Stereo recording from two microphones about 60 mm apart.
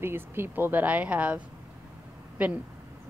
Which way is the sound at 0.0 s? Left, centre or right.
Right.